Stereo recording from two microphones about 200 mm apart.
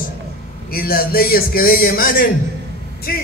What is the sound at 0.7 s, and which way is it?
A man's voice, 50° left (ahead or behind).